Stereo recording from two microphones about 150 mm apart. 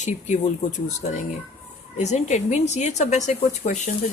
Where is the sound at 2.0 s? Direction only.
50° left (ahead or behind).